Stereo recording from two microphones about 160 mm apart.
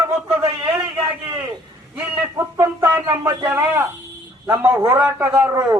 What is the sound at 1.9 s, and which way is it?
A man's voice, 15° right (ahead or behind).